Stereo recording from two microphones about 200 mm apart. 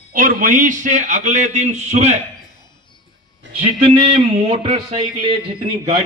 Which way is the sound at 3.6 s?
30° right (ahead or behind).